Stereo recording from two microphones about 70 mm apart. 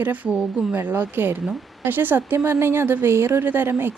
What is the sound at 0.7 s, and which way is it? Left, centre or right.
Speech, right.